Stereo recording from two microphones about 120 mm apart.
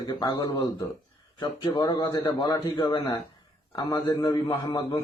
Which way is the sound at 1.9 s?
25° left (ahead or behind).